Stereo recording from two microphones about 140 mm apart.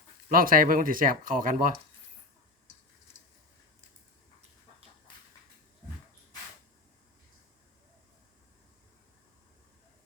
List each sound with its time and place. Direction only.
0.3 s speech: 90° right